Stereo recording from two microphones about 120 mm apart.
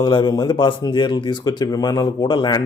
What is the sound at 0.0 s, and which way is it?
Speech, 40° left (ahead or behind).